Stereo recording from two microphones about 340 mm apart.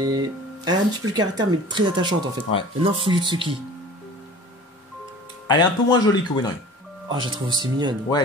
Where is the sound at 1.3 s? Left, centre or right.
Centre.